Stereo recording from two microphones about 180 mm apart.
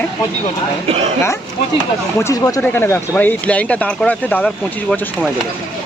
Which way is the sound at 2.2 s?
15° left (ahead or behind).